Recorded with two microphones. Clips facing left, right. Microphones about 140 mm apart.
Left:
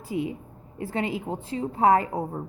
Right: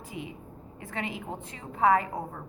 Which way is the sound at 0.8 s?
30° left (ahead or behind).